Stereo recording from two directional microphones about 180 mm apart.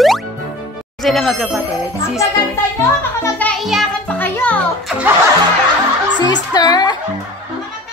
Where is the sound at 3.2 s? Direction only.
10° left (ahead or behind).